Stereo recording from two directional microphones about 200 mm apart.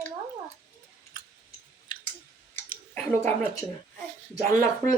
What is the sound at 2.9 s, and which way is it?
Speech, 10° left (ahead or behind).